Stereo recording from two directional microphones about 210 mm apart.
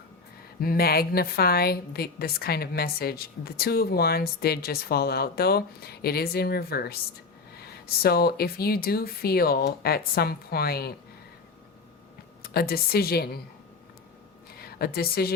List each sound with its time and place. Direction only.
0.6 s a woman's voice: 45° left (ahead or behind)
12.4 s a woman's voice: 45° left (ahead or behind)
14.6 s a woman's voice: 45° left (ahead or behind)